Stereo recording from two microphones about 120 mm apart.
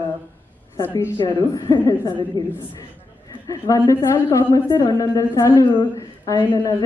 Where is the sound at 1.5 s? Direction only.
35° left (ahead or behind).